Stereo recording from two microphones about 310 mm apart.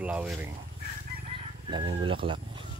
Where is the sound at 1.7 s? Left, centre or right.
Centre.